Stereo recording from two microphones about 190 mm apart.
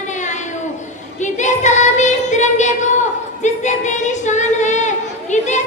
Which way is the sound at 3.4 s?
40° left (ahead or behind).